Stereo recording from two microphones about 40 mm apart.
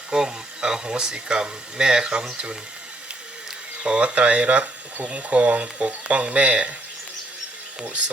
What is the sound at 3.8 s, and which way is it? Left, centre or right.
Speech, right.